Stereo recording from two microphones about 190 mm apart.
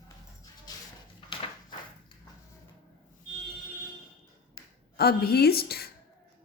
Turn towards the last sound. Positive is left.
turn(degrees=55)  # may be behind; listen again after turning